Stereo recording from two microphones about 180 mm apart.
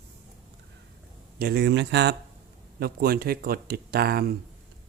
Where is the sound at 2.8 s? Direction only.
60° right (ahead or behind).